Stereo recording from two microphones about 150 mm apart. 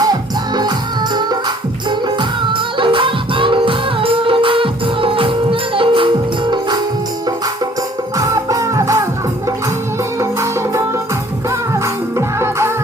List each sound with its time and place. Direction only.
0.0 s music: 25° right (ahead or behind)
8.1 s music: 25° right (ahead or behind)
10.2 s music: 20° right (ahead or behind)